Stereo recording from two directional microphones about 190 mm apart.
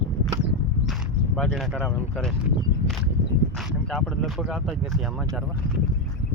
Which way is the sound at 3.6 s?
Centre (ahead or behind).